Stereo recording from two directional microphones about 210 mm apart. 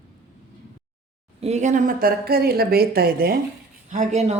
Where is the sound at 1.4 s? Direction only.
30° right (ahead or behind).